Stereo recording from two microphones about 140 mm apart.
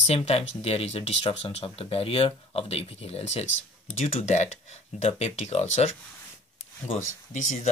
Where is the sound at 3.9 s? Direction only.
50° left (ahead or behind).